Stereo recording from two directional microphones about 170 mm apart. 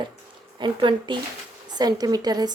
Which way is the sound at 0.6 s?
30° right (ahead or behind).